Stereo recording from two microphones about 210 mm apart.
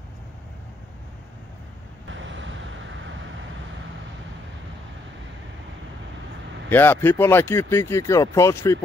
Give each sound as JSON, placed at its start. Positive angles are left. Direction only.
{"t": 2.0, "sound": "vehicle", "side_deg": -60}
{"t": 6.7, "sound": "speech", "side_deg": 10}